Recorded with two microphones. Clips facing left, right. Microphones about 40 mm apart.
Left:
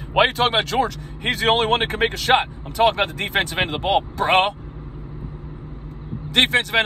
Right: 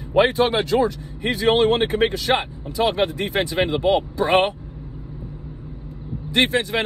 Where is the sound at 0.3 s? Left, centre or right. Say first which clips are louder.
Right 1 dB; left.